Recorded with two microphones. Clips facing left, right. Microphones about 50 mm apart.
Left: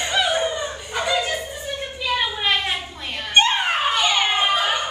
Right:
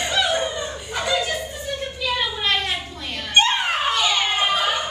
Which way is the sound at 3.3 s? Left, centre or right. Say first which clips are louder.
Left 1 dB; centre.